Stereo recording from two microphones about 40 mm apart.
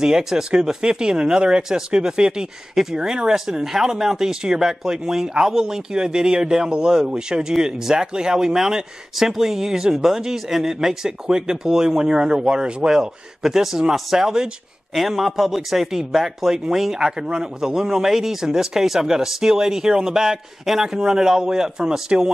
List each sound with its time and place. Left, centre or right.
0.0 s speech: centre
2.7 s speech: centre
3.0 s a man's voice: centre